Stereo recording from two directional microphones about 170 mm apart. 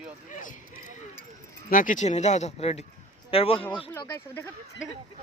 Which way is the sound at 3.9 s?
15° left (ahead or behind).